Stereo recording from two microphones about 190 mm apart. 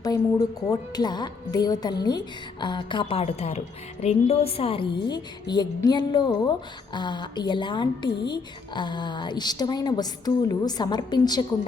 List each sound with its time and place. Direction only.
0.1 s speech: 20° left (ahead or behind)